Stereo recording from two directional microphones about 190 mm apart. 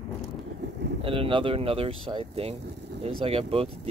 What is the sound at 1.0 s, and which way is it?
Speech, 30° right (ahead or behind).